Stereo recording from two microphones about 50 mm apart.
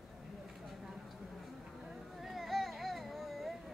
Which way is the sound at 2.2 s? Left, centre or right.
Centre.